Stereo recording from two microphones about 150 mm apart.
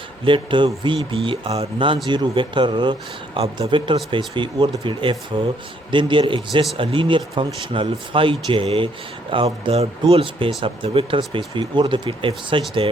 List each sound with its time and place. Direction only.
0.3 s speech: 35° right (ahead or behind)